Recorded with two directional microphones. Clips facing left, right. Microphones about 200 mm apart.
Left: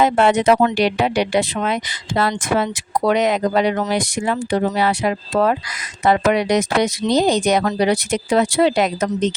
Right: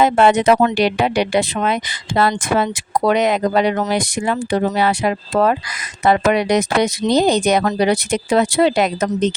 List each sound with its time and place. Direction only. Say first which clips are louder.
0.0 s speech: right 2 dB; 60° right (ahead or behind)